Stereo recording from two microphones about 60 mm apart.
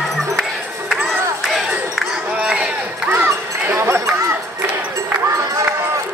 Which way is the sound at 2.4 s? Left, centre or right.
Centre.